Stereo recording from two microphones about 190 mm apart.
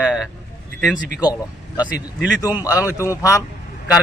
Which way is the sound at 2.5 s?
10° right (ahead or behind).